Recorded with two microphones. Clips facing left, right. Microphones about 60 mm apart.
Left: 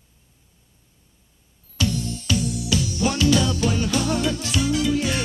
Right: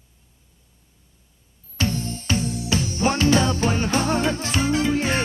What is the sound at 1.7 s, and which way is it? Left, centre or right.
Music, right.